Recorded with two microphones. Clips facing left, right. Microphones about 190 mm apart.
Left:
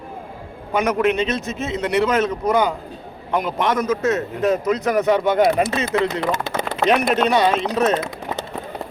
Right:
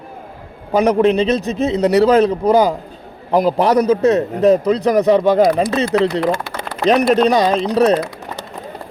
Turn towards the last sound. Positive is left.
turn(degrees=-35)  # may be behind; listen again after turning